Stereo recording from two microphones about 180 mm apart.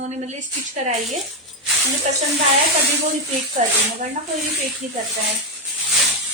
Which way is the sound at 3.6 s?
35° right (ahead or behind).